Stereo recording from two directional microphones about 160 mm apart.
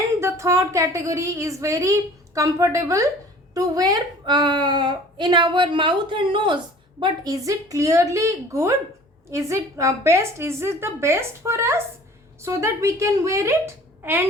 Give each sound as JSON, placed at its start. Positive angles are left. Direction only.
{"t": 0.2, "sound": "a woman's voice", "side_deg": -15}